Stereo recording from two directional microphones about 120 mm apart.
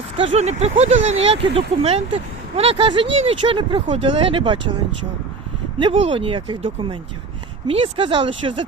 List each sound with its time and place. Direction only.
0.2 s speech: 60° right (ahead or behind)
5.9 s speech: 50° right (ahead or behind)